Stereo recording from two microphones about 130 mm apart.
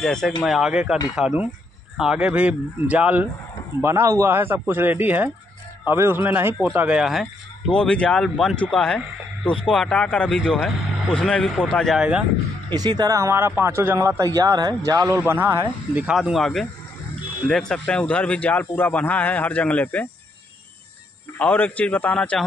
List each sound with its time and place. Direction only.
0.0 s a man's voice: 5° left (ahead or behind)
12.6 s speech: 30° right (ahead or behind)
15.1 s speech: 15° right (ahead or behind)
16.2 s a man's voice: centre (ahead or behind)
21.4 s speech: 10° left (ahead or behind)